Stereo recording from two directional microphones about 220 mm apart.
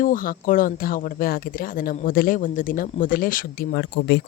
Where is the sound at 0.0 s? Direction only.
40° left (ahead or behind).